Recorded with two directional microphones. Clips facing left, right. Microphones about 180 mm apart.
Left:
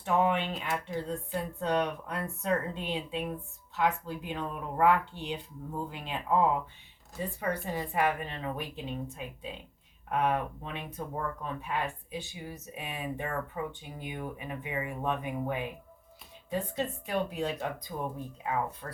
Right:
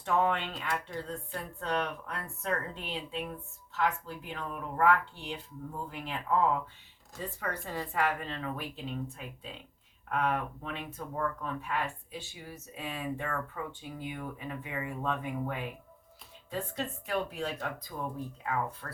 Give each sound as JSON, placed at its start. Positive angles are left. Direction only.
{"t": 0.0, "sound": "speech", "side_deg": 15}